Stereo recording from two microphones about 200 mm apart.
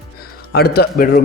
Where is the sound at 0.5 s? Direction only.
55° left (ahead or behind).